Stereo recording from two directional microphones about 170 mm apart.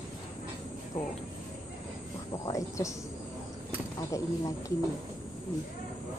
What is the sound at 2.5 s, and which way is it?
Speech, 20° left (ahead or behind).